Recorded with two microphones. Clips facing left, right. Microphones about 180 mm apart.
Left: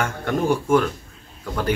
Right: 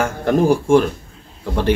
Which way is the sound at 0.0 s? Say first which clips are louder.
Right 6 dB; 35° right (ahead or behind).